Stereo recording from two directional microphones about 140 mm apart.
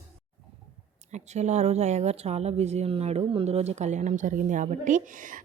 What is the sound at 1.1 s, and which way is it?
Speech, 55° right (ahead or behind).